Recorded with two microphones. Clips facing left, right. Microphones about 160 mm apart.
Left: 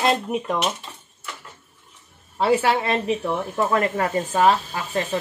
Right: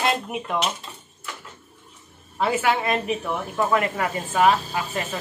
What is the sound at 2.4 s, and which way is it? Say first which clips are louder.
Speech: left 3 dB; 35° left (ahead or behind).